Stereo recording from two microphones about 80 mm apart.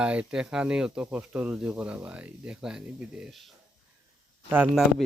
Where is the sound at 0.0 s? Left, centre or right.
Centre.